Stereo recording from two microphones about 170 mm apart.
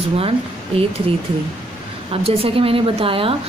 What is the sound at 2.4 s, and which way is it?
Speech, 35° right (ahead or behind).